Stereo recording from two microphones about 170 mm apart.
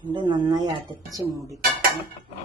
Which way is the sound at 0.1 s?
25° right (ahead or behind).